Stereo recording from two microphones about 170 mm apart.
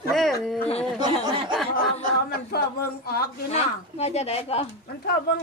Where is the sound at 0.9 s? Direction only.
25° right (ahead or behind).